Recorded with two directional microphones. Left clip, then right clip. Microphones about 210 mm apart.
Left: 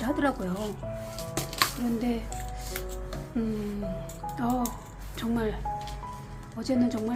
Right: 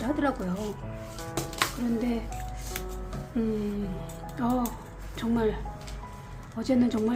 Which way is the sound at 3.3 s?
5° right (ahead or behind).